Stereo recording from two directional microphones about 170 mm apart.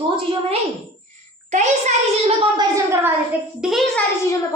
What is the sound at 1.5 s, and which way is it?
Speech, 45° right (ahead or behind).